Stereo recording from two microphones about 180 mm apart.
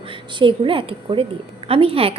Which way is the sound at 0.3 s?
30° right (ahead or behind).